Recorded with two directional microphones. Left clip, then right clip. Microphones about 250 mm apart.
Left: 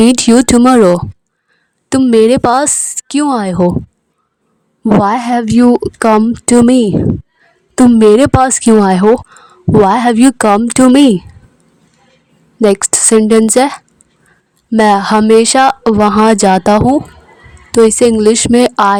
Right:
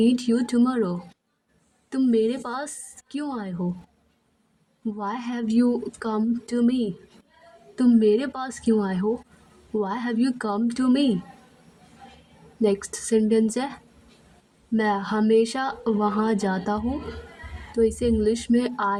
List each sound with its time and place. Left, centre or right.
0.0 s a woman's voice: left
5.0 s speech: left
12.6 s a woman's voice: left